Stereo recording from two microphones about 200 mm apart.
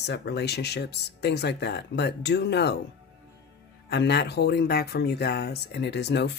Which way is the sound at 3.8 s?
55° left (ahead or behind).